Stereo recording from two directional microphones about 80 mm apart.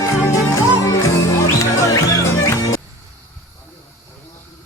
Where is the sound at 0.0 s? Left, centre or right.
Left.